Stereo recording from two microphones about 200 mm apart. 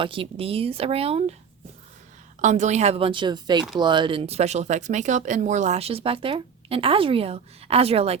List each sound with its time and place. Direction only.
0.0 s speech: 25° right (ahead or behind)
2.4 s speech: 35° right (ahead or behind)